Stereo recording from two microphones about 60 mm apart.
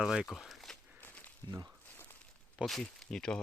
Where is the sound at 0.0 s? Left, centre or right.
Centre.